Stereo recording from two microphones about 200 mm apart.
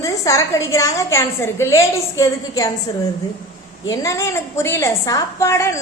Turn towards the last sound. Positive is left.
turn(degrees=15)  # may be behind; listen again after turning